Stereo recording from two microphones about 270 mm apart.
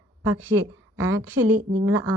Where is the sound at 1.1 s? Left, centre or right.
Right.